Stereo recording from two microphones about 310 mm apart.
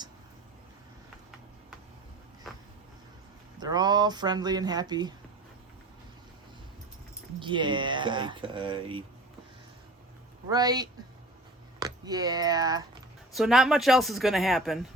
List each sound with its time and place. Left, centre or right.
3.6 s speech: centre
7.3 s speech: centre
10.5 s speech: centre
13.3 s speech: centre